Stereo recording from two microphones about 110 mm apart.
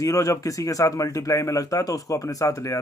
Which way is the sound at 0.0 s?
30° left (ahead or behind).